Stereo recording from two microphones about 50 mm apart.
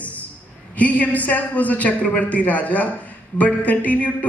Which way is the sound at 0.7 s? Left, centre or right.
Left.